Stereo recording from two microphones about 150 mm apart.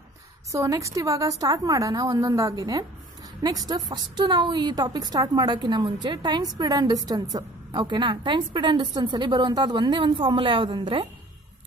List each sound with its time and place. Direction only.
0.5 s a woman's voice: 20° right (ahead or behind)